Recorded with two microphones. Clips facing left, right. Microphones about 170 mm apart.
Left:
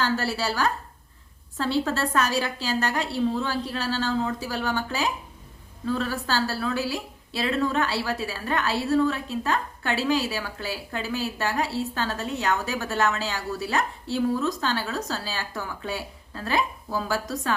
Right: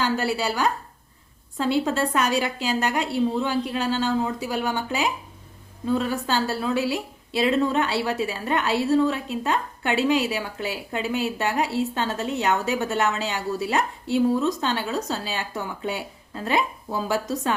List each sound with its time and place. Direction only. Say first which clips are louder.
0.0 s a woman's voice: right 2 dB; 15° right (ahead or behind)